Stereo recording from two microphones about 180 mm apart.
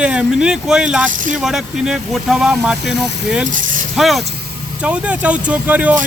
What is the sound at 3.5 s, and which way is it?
Speech, 45° right (ahead or behind).